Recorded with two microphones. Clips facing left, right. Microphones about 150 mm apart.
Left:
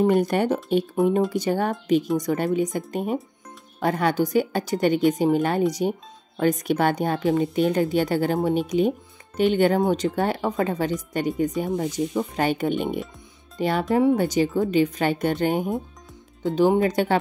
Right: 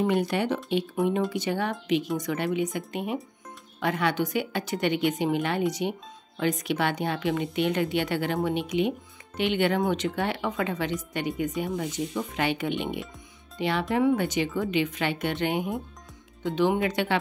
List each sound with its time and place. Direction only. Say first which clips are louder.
0.0 s speech: left 5 dB; 45° left (ahead or behind)